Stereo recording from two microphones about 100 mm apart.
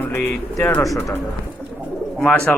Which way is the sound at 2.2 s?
10° left (ahead or behind).